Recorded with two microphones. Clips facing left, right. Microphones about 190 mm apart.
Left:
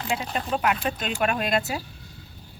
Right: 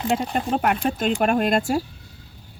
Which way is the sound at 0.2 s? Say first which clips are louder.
Right 4 dB; 50° right (ahead or behind).